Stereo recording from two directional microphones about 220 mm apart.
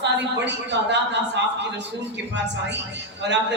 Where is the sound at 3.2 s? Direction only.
50° right (ahead or behind).